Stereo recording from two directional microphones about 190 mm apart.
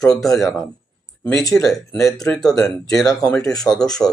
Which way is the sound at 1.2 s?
Centre (ahead or behind).